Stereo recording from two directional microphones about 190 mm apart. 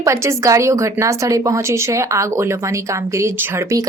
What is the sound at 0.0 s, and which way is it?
A woman's voice, 15° right (ahead or behind).